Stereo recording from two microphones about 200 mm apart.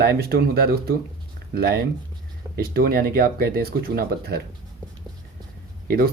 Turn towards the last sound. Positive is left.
turn(degrees=-50)  # may be behind; listen again after turning